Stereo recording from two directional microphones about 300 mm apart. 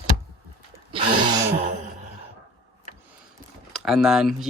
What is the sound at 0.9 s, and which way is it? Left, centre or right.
Gasp, centre.